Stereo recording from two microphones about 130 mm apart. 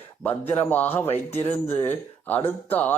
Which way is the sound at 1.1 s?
50° left (ahead or behind).